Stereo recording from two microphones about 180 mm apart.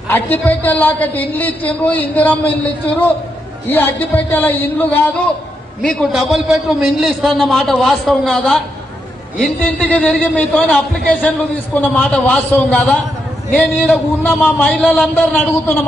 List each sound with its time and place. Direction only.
0.1 s a woman's voice: 10° left (ahead or behind)